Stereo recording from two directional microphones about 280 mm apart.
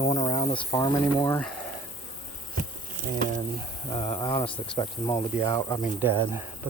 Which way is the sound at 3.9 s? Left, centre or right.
Centre.